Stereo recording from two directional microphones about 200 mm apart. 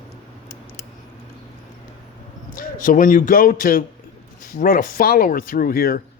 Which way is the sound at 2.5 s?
40° left (ahead or behind).